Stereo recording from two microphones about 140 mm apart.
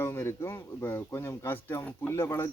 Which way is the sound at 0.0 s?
20° left (ahead or behind).